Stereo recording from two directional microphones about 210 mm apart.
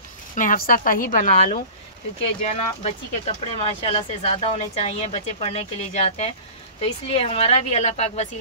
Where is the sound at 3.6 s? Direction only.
25° left (ahead or behind).